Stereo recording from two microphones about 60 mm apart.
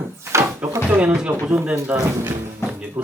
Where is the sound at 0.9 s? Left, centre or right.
Right.